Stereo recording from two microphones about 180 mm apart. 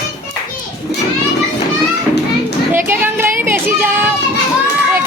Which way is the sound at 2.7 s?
10° right (ahead or behind).